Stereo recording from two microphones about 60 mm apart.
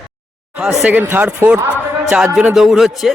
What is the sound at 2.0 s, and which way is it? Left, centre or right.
A man's voice, centre.